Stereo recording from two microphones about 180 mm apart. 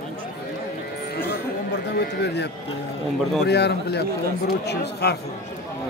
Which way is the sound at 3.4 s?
65° left (ahead or behind).